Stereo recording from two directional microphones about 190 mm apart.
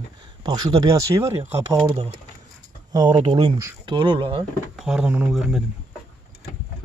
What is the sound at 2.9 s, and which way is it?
Speech, 25° right (ahead or behind).